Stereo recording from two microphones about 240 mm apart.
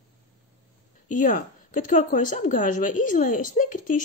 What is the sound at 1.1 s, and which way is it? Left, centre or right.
Speech, left.